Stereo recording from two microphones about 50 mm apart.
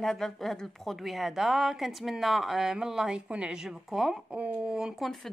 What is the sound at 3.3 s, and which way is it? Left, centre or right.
Speech, right.